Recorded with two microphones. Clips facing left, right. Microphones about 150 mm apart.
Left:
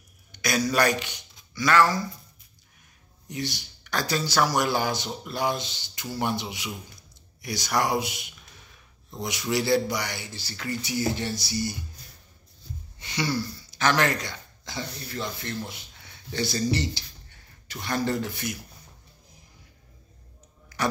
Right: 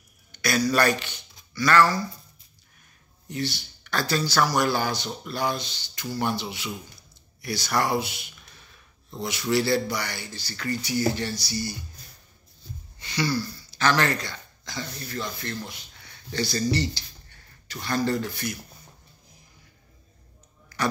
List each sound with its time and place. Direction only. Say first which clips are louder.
0.3 s a man's voice: right 2 dB; 15° left (ahead or behind)
3.3 s speech: right 2 dB; 15° left (ahead or behind)
13.0 s speech: right 1 dB; 20° left (ahead or behind)